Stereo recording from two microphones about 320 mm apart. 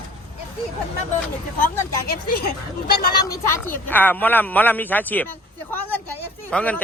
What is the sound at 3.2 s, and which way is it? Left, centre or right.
A woman's voice, centre.